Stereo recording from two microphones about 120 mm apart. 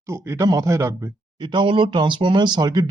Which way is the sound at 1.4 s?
40° right (ahead or behind).